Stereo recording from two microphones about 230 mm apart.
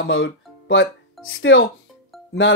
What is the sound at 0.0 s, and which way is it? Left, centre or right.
Speech, left.